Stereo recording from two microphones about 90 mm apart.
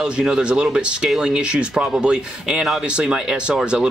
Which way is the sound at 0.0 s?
10° right (ahead or behind).